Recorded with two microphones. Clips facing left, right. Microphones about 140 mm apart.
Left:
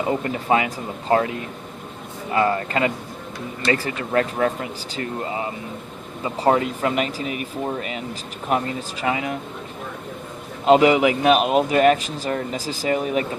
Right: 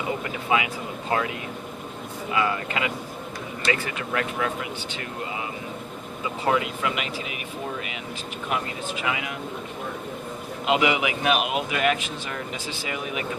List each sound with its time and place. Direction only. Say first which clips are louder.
0.1 s a man's voice: left 4 dB; 40° left (ahead or behind)
10.7 s a man's voice: left 8 dB; 40° left (ahead or behind)